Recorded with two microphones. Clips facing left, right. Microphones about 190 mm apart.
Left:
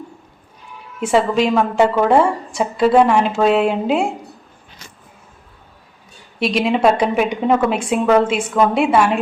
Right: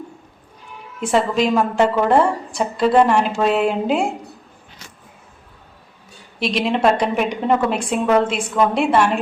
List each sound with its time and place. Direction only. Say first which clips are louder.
1.0 s a woman's voice: left 2 dB; centre (ahead or behind)
6.4 s a woman's voice: left 2 dB; centre (ahead or behind)